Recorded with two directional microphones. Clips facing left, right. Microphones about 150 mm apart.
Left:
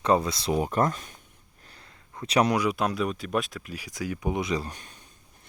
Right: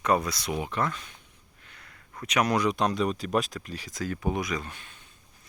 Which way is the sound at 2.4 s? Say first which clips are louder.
Even; 10° left (ahead or behind).